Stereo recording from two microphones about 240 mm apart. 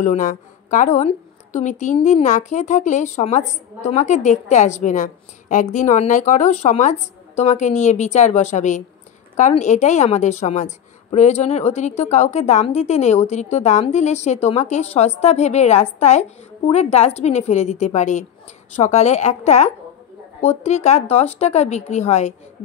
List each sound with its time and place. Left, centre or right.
0.0 s a woman's voice: left